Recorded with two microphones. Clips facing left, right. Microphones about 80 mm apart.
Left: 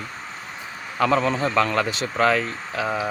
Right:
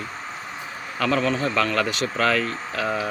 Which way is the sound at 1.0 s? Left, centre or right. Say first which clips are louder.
Left 2 dB; left.